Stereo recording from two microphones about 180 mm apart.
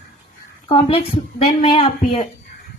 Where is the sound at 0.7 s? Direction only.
35° left (ahead or behind).